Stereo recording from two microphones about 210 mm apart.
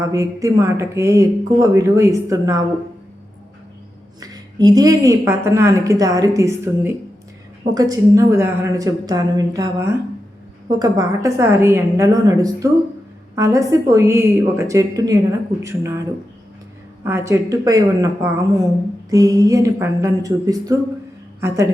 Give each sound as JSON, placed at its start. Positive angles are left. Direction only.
{"t": 0.1, "sound": "a woman's voice", "side_deg": -15}
{"t": 4.2, "sound": "a woman's voice", "side_deg": -20}